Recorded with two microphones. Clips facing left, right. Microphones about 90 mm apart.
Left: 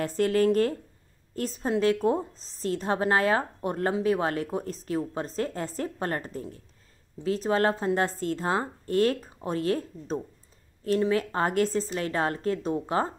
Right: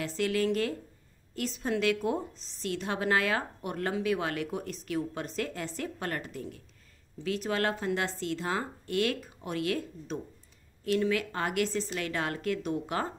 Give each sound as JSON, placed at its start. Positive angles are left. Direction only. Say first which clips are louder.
{"t": 0.0, "sound": "a woman's voice", "louder": "left 6 dB", "side_deg": 45}